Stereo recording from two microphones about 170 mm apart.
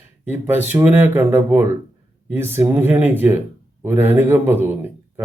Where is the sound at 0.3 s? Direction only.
10° right (ahead or behind).